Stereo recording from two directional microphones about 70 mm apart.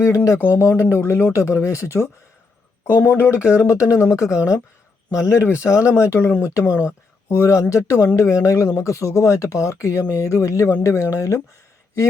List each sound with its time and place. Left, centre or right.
0.6 s speech: left
2.8 s speech: left